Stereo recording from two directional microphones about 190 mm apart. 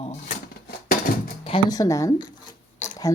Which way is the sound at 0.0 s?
35° left (ahead or behind).